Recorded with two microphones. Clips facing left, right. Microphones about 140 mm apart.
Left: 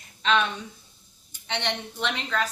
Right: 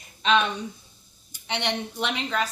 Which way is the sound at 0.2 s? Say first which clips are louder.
Right 2 dB; 15° right (ahead or behind).